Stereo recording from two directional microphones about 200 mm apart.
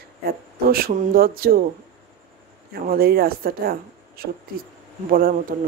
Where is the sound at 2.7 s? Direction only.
50° right (ahead or behind).